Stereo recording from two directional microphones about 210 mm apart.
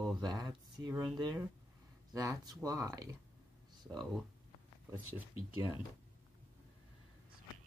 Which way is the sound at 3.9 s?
Centre (ahead or behind).